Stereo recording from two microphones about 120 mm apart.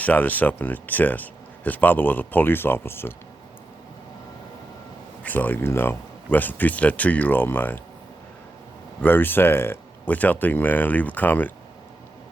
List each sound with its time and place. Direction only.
0.0 s speech: 15° left (ahead or behind)
5.2 s speech: 15° left (ahead or behind)
9.0 s speech: 15° left (ahead or behind)